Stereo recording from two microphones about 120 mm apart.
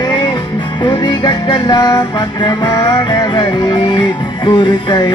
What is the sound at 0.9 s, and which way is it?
Music, 40° left (ahead or behind).